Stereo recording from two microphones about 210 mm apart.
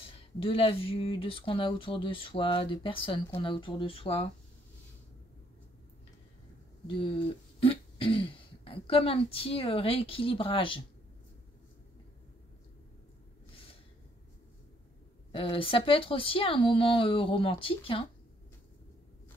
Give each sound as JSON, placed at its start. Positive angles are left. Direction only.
{"t": 0.0, "sound": "speech", "side_deg": 25}
{"t": 6.9, "sound": "speech", "side_deg": 25}
{"t": 15.3, "sound": "speech", "side_deg": 25}